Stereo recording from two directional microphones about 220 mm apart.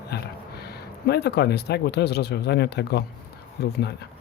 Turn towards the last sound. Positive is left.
turn(degrees=50)  # may be behind; listen again after turning